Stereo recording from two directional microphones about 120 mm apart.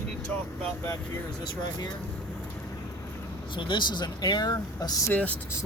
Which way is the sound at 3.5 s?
40° left (ahead or behind).